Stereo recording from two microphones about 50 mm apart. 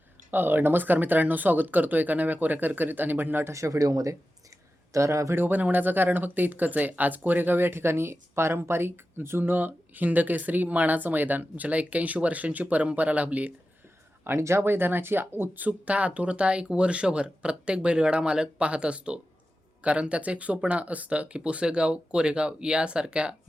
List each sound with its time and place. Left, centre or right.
0.3 s speech: right
3.5 s speech: right
5.3 s speech: right
9.4 s speech: right
14.3 s speech: right
15.6 s speech: right